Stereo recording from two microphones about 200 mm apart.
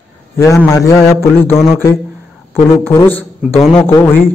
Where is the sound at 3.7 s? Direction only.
10° left (ahead or behind).